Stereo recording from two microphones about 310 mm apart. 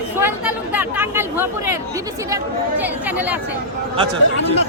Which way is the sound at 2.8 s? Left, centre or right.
Centre.